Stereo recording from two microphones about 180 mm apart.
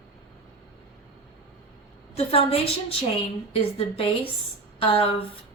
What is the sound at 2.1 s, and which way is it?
A woman's voice, 35° left (ahead or behind).